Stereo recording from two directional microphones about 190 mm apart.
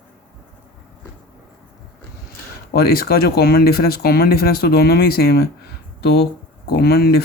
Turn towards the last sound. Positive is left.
turn(degrees=55)  # may be behind; listen again after turning